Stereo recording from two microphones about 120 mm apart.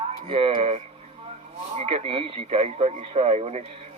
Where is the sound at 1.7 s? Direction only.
55° right (ahead or behind).